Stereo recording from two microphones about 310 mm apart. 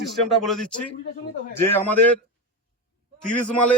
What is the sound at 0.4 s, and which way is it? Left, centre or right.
A man's voice, centre.